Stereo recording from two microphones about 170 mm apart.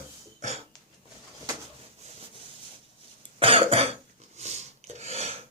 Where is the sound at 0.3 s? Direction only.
40° right (ahead or behind).